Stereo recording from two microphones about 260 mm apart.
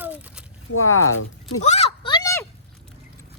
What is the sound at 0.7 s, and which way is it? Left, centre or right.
Speech, left.